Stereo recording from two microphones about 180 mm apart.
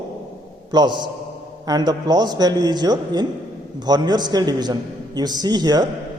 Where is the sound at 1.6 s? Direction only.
20° right (ahead or behind).